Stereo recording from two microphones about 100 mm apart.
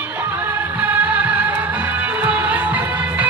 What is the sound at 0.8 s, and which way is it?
Music, 15° right (ahead or behind).